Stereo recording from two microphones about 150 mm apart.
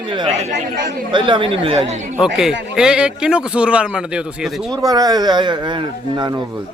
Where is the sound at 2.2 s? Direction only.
5° right (ahead or behind).